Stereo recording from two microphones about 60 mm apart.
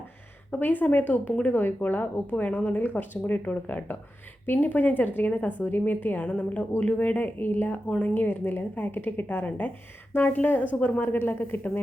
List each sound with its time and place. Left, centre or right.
0.6 s speech: left
8.1 s a woman's voice: left